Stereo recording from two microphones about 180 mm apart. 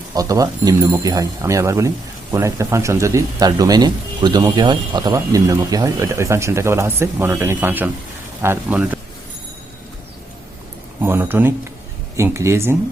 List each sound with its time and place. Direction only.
0.1 s speech: 20° right (ahead or behind)
11.0 s speech: 10° right (ahead or behind)